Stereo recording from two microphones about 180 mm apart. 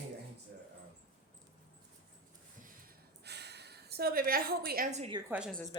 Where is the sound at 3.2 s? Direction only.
65° right (ahead or behind).